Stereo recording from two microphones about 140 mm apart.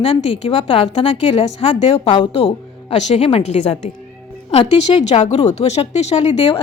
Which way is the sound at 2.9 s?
55° left (ahead or behind).